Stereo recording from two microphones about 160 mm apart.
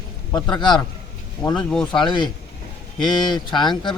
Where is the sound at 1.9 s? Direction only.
30° left (ahead or behind).